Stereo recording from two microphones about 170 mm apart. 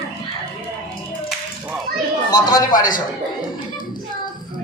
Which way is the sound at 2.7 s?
50° left (ahead or behind).